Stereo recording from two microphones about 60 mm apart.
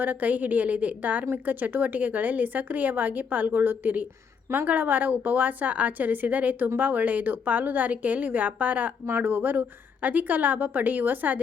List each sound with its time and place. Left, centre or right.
0.0 s a woman's voice: right